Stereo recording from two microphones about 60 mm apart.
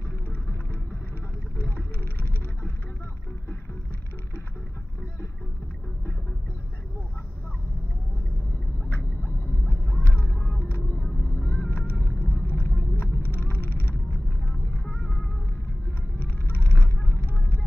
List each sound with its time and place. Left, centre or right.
8.8 s a sound: left
12.1 s vehicle: left
16.2 s vehicle: left